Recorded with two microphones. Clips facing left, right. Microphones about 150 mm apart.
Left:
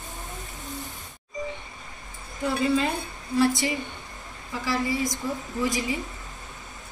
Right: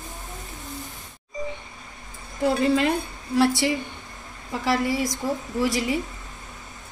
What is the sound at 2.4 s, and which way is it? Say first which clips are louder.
A woman's voice: right 4 dB; 70° right (ahead or behind).